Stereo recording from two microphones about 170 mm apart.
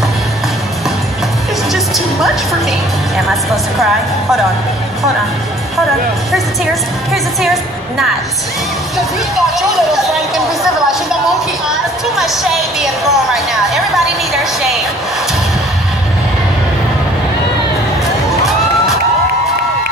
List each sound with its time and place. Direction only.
1.7 s music: centre (ahead or behind)
3.4 s a woman's voice: centre (ahead or behind)
6.3 s a woman's voice: centre (ahead or behind)
9.6 s a woman's voice: centre (ahead or behind)
12.2 s a woman's voice: centre (ahead or behind)